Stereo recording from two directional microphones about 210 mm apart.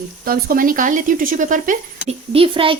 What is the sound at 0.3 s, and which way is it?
Speech, 45° right (ahead or behind).